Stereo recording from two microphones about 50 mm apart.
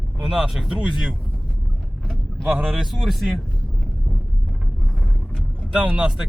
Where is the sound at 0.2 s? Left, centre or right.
Centre.